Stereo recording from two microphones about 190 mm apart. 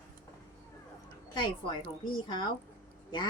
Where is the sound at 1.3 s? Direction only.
20° left (ahead or behind).